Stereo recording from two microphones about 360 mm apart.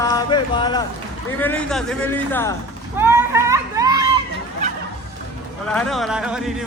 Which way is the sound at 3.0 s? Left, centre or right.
Centre.